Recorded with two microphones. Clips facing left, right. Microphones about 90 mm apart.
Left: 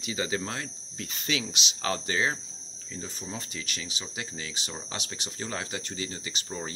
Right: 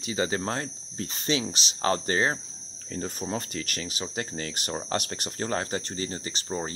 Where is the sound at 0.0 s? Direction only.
35° right (ahead or behind).